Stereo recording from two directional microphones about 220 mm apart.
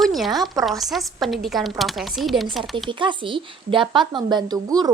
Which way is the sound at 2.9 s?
20° right (ahead or behind).